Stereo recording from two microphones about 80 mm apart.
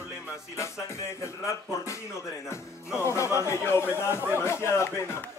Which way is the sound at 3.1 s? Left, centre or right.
Left.